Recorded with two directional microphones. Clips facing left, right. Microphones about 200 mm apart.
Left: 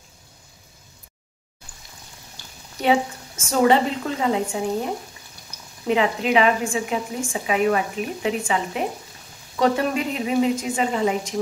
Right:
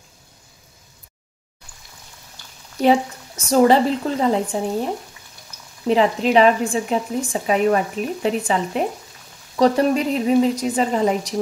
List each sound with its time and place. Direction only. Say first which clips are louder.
2.8 s speech: right 3 dB; 35° right (ahead or behind)
5.9 s speech: right 3 dB; 35° right (ahead or behind)